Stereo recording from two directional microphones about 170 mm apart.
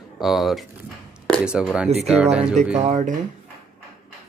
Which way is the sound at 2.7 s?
45° right (ahead or behind).